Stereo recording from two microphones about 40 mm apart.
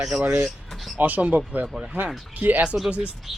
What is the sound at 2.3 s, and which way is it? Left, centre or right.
Speech, right.